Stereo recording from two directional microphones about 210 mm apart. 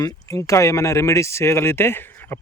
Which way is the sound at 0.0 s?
15° left (ahead or behind).